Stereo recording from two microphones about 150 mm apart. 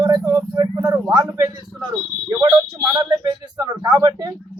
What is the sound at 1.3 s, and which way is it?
Speech, 20° right (ahead or behind).